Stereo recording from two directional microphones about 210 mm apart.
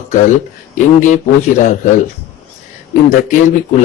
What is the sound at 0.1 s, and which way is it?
A man's voice, 35° left (ahead or behind).